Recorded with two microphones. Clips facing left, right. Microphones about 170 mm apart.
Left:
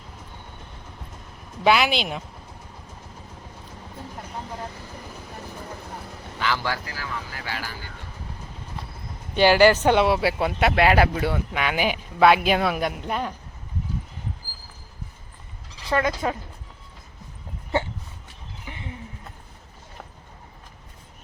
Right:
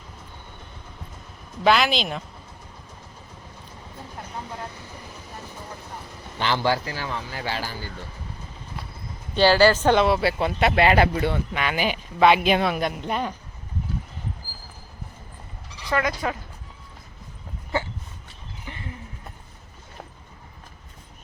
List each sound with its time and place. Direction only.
1.6 s speech: 10° left (ahead or behind)
6.4 s speech: 30° right (ahead or behind)
9.3 s speech: 15° left (ahead or behind); by 13.3 s centre (ahead or behind)
15.9 s speech: 25° left (ahead or behind)
18.7 s a sound: 10° left (ahead or behind)